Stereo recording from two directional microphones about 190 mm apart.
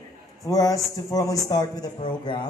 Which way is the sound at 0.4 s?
15° left (ahead or behind).